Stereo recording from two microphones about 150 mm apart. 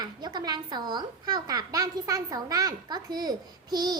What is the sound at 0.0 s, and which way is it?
A child's voice, 30° right (ahead or behind).